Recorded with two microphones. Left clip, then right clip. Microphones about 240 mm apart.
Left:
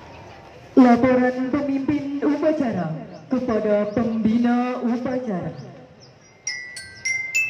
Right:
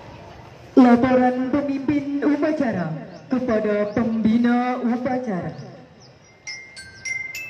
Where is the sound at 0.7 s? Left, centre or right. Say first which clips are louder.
Even; right.